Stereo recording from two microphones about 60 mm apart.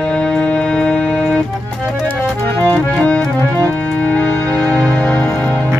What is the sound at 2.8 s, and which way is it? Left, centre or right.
Accordion, left.